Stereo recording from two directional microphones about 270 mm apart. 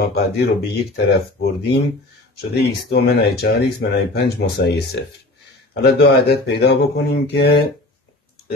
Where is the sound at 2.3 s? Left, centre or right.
Left.